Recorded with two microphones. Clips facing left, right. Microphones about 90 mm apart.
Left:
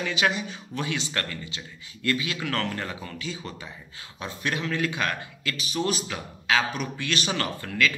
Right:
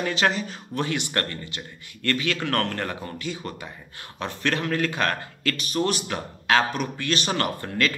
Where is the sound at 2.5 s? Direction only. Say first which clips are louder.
Right 3 dB; 50° right (ahead or behind).